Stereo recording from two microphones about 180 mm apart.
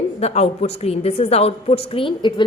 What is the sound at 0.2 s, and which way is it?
A woman's voice, 35° left (ahead or behind).